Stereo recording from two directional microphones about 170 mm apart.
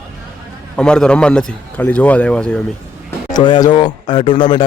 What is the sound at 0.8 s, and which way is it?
Speech, 5° left (ahead or behind).